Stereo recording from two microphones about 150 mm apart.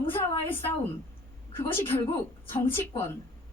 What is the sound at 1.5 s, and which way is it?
Speech, 15° left (ahead or behind).